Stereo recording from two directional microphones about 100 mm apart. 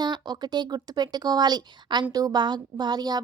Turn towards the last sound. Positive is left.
turn(degrees=-45)  # may be behind; listen again after turning